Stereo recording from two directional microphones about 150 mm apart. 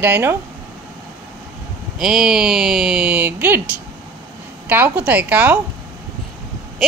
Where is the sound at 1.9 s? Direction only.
5° right (ahead or behind).